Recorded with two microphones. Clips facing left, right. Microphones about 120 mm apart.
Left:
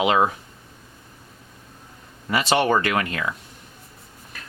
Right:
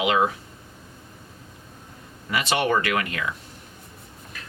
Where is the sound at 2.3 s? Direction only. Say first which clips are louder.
Left 3 dB; 35° left (ahead or behind).